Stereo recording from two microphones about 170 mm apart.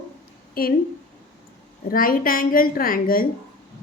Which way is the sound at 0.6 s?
60° left (ahead or behind).